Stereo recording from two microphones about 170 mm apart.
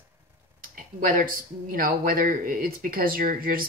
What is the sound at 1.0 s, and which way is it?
Speech, 55° right (ahead or behind).